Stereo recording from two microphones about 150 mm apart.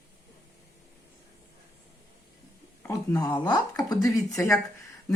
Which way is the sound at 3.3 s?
25° left (ahead or behind).